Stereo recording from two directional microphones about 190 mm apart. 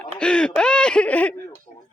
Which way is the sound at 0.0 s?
5° left (ahead or behind).